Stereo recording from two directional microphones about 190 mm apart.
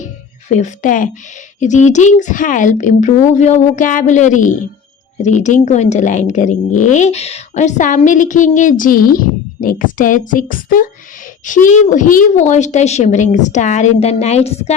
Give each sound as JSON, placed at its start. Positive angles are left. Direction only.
{"t": 0.0, "sound": "music", "side_deg": 40}
{"t": 1.6, "sound": "speech", "side_deg": 40}